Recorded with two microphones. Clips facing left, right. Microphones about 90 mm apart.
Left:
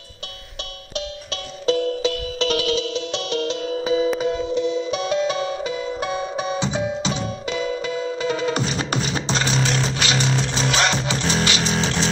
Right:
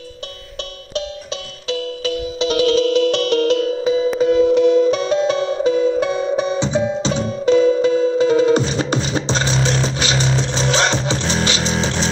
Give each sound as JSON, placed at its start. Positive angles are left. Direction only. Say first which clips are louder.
{"t": 2.3, "sound": "music", "louder": "right 6 dB", "side_deg": -20}
{"t": 2.6, "sound": "music", "louder": "right 8 dB", "side_deg": -40}
{"t": 2.9, "sound": "music", "louder": "right 10 dB", "side_deg": -55}
{"t": 3.8, "sound": "music", "louder": "right 3 dB", "side_deg": 15}
{"t": 4.4, "sound": "music", "louder": "right 10 dB", "side_deg": -65}